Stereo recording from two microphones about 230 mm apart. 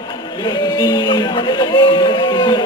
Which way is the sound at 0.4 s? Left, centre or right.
Centre.